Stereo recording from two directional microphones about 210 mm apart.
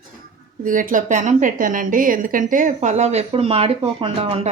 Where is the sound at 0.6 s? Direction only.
40° right (ahead or behind).